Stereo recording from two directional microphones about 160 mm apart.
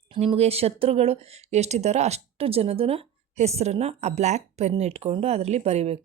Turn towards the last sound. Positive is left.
turn(degrees=-40)  # may be behind; listen again after turning